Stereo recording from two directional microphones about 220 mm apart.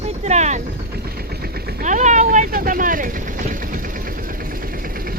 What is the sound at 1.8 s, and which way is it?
Speech, 35° right (ahead or behind).